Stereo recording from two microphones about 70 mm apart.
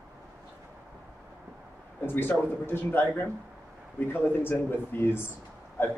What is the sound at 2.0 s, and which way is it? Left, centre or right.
Speech, left.